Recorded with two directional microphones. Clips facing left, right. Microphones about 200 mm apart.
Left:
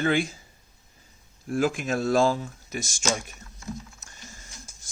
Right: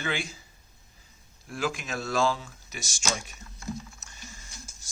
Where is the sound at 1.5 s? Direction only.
50° left (ahead or behind).